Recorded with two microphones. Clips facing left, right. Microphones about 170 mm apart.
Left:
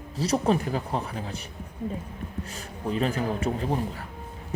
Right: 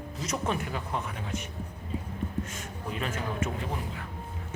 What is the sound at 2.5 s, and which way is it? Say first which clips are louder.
A man's voice: left 6 dB; 35° left (ahead or behind).